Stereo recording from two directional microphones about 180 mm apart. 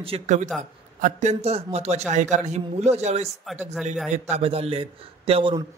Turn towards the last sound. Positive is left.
turn(degrees=-30)  # may be behind; listen again after turning